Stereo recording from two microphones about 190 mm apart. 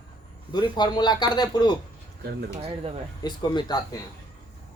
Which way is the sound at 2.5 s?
35° right (ahead or behind).